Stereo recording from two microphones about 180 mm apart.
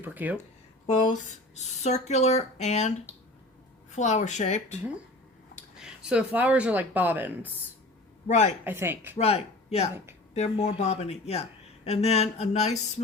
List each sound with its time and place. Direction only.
0.0 s speech: 10° right (ahead or behind)
0.9 s speech: 45° left (ahead or behind)
3.9 s speech: 40° left (ahead or behind)
5.8 s speech: 5° right (ahead or behind)
8.3 s speech: 40° left (ahead or behind)
8.6 s speech: 10° right (ahead or behind)
9.1 s speech: 35° left (ahead or behind)